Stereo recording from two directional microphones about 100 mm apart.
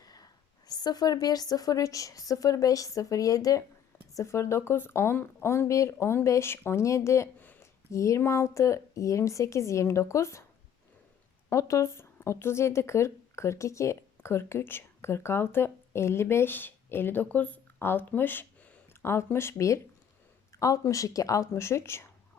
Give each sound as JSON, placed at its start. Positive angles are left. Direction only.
{"t": 0.0, "sound": "a sound", "side_deg": 40}
{"t": 0.7, "sound": "a woman's voice", "side_deg": 40}
{"t": 11.4, "sound": "a woman's voice", "side_deg": 30}